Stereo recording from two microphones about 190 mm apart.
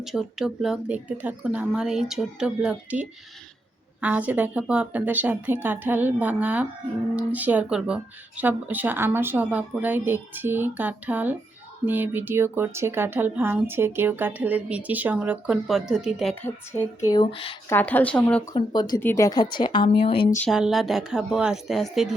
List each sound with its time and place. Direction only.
0.0 s speech: centre (ahead or behind)
16.3 s a woman's voice: 10° left (ahead or behind); by 17.6 s 30° left (ahead or behind)
17.7 s speech: 10° left (ahead or behind)
18.5 s a woman's voice: 20° left (ahead or behind)
20.5 s speech: centre (ahead or behind)